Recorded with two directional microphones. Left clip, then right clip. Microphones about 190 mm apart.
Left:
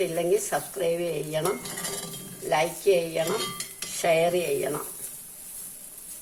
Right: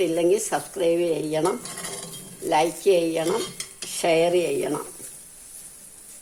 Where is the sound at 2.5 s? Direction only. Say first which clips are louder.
Right 3 dB; 45° right (ahead or behind).